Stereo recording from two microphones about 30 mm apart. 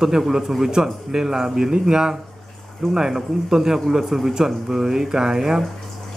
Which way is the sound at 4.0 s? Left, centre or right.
Centre.